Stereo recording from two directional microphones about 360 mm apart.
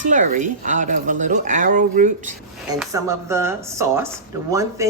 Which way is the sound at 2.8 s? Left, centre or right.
Centre.